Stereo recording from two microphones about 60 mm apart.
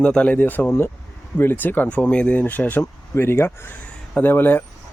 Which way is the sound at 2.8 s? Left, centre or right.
Left.